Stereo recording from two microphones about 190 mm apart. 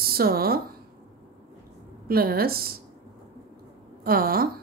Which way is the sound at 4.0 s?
50° right (ahead or behind).